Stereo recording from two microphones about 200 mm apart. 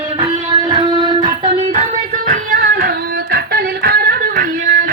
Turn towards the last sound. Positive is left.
turn(degrees=-45)  # may be behind; listen again after turning